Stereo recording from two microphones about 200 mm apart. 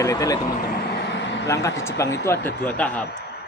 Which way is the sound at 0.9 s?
60° left (ahead or behind).